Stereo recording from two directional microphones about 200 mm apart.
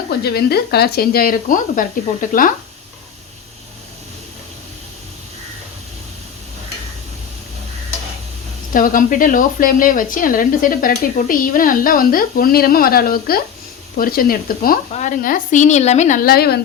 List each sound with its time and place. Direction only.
0.1 s a woman's voice: 50° left (ahead or behind)
8.7 s a woman's voice: 45° left (ahead or behind)